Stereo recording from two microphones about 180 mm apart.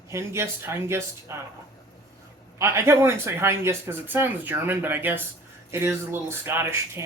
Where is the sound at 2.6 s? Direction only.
15° right (ahead or behind).